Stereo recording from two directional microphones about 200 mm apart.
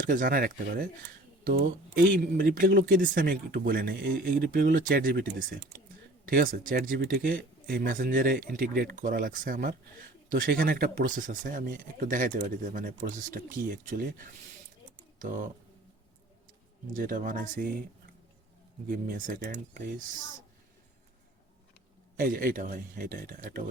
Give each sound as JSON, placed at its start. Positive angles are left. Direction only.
{"t": 0.1, "sound": "speech", "side_deg": -45}
{"t": 16.9, "sound": "speech", "side_deg": -45}
{"t": 18.9, "sound": "speech", "side_deg": -45}
{"t": 22.2, "sound": "speech", "side_deg": -45}